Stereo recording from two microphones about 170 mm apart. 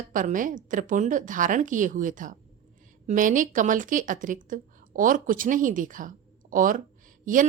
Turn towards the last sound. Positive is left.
turn(degrees=-50)  # may be behind; listen again after turning